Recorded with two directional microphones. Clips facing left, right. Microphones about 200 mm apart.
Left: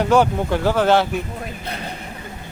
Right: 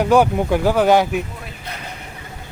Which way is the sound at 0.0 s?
10° right (ahead or behind).